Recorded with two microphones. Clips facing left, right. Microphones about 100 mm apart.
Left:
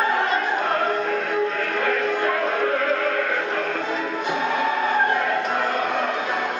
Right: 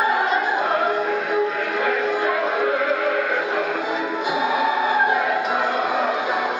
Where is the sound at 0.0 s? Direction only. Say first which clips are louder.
Right 2 dB; 10° right (ahead or behind).